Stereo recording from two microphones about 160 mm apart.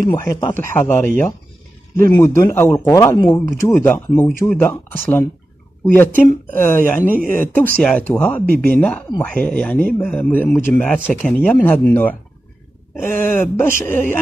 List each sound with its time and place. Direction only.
0.2 s a man's voice: 25° left (ahead or behind)